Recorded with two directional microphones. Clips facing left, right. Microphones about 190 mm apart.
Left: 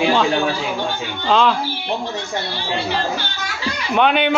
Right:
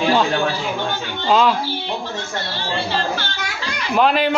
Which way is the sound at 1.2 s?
5° right (ahead or behind).